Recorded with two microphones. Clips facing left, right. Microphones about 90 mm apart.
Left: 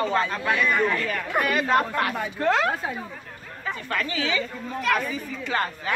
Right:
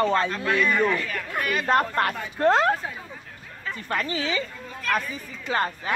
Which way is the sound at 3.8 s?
30° right (ahead or behind).